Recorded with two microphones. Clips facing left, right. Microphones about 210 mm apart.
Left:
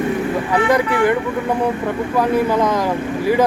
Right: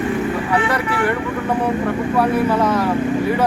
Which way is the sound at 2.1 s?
10° left (ahead or behind).